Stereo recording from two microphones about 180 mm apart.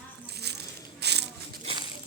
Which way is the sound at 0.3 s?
65° right (ahead or behind).